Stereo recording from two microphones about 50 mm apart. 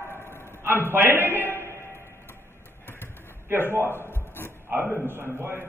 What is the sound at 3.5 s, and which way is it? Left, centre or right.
Speech, right.